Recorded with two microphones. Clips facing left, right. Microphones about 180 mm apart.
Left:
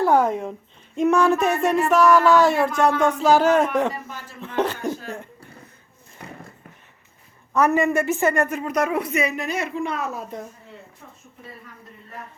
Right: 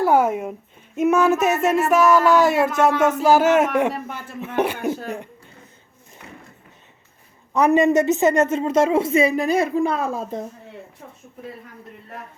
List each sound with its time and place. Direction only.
0.0 s a sound: 5° right (ahead or behind)
3.0 s speech: 5° right (ahead or behind)
7.5 s a woman's voice: 15° right (ahead or behind)